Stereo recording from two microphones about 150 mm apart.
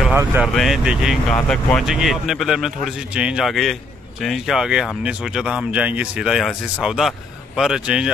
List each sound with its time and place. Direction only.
0.0 s vehicle: 15° right (ahead or behind)
0.4 s speech: 5° right (ahead or behind)